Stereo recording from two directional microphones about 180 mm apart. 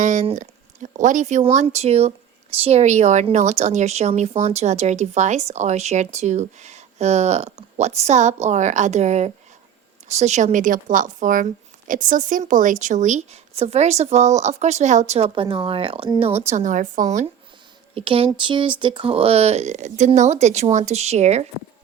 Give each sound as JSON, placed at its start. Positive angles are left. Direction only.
{"t": 0.0, "sound": "a woman's voice", "side_deg": -45}
{"t": 17.9, "sound": "a woman's voice", "side_deg": -30}